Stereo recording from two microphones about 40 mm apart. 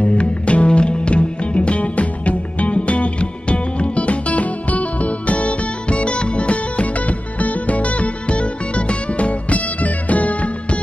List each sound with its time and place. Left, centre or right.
0.0 s music: left